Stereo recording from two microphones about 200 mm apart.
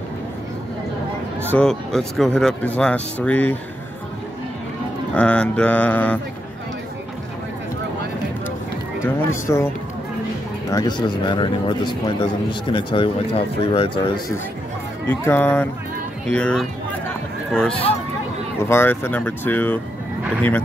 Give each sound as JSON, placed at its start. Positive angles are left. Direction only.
{"t": 1.5, "sound": "speech", "side_deg": 5}
{"t": 5.1, "sound": "speech", "side_deg": 5}
{"t": 9.5, "sound": "speech", "side_deg": 15}
{"t": 10.7, "sound": "speech", "side_deg": 20}
{"t": 15.0, "sound": "speech", "side_deg": 10}